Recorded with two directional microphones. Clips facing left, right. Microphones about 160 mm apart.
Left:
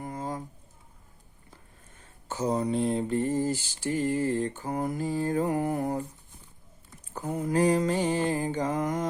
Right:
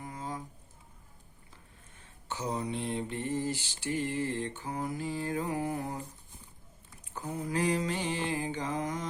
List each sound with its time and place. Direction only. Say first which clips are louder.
0.0 s a sound: left 5 dB; 45° left (ahead or behind)
2.2 s mantra: left 7 dB; 40° left (ahead or behind)
7.1 s mantra: left 6 dB; 40° left (ahead or behind)